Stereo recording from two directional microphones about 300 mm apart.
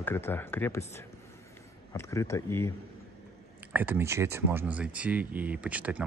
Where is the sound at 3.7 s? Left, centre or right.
Centre.